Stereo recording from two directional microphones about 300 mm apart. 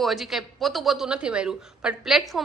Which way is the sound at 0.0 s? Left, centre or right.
Centre.